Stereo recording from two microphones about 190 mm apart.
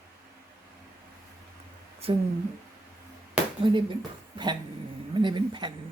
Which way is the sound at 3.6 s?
25° right (ahead or behind).